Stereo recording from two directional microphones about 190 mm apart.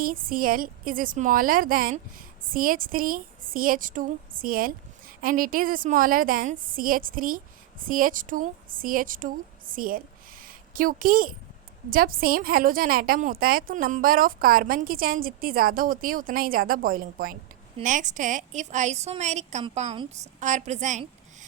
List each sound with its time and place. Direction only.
0.0 s a woman's voice: 45° right (ahead or behind)